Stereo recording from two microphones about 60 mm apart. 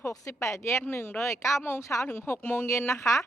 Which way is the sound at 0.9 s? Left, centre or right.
Left.